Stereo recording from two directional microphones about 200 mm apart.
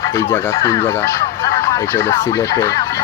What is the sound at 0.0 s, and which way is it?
Speech, 15° left (ahead or behind).